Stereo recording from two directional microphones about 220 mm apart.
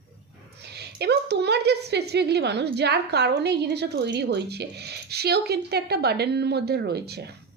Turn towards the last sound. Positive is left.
turn(degrees=-50)  # may be behind; listen again after turning